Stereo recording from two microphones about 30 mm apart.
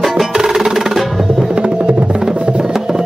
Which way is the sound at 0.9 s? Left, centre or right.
Centre.